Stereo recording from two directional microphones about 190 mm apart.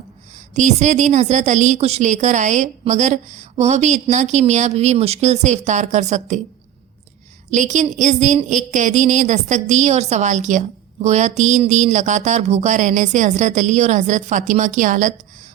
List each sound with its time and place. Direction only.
0.5 s a woman's voice: 40° right (ahead or behind)
7.5 s a woman's voice: 40° right (ahead or behind)